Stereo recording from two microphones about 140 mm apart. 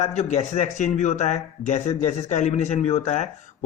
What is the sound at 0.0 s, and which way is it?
Speech, 55° left (ahead or behind).